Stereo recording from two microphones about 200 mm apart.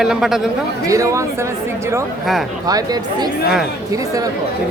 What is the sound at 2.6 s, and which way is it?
Speech, 20° right (ahead or behind).